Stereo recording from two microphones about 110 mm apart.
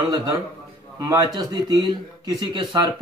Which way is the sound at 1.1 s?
35° right (ahead or behind).